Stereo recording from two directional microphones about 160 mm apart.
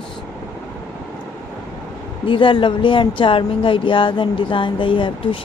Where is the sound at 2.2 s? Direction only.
30° left (ahead or behind).